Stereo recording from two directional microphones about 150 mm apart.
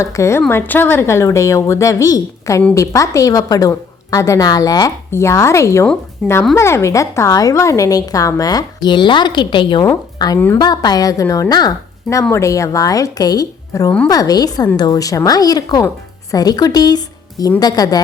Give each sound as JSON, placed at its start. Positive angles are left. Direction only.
{"t": 0.0, "sound": "a woman's voice", "side_deg": 20}
{"t": 6.2, "sound": "speech", "side_deg": 0}
{"t": 6.6, "sound": "a woman's voice", "side_deg": 20}